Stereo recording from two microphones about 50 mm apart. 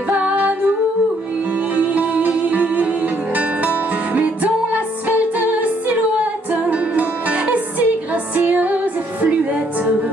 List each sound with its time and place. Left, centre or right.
0.1 s music: right
1.8 s music: right